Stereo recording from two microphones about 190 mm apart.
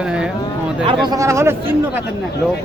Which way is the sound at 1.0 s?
15° right (ahead or behind).